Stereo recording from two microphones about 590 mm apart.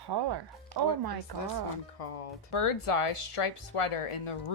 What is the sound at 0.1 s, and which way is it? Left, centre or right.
Speech, right.